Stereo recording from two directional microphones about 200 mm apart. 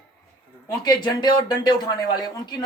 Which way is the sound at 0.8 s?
20° left (ahead or behind).